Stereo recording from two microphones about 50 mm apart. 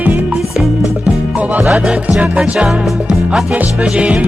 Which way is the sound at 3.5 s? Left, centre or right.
Right.